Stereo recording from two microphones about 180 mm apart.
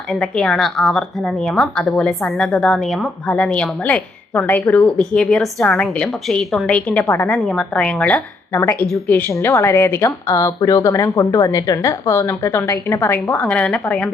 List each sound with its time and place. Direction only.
0.1 s a woman's voice: 5° left (ahead or behind)